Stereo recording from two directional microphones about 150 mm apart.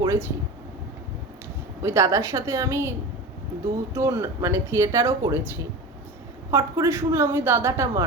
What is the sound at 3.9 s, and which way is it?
A woman's voice, 20° right (ahead or behind).